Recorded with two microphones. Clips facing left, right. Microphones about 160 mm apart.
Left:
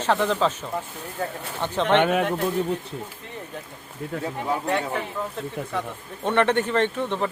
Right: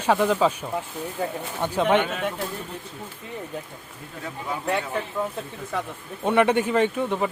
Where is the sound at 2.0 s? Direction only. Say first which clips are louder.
Left 7 dB; 60° left (ahead or behind).